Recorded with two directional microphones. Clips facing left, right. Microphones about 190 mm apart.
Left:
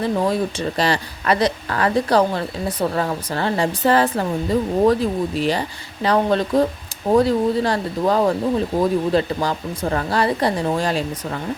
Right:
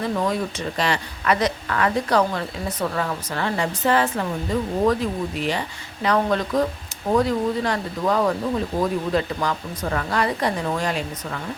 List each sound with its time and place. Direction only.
0.0 s a woman's voice: 30° left (ahead or behind)